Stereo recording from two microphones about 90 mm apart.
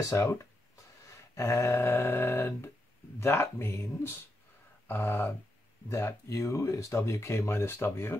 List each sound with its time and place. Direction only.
0.0 s speech: 30° left (ahead or behind)
1.0 s a sound: 35° left (ahead or behind)
3.2 s speech: 30° left (ahead or behind)
5.9 s speech: 40° left (ahead or behind)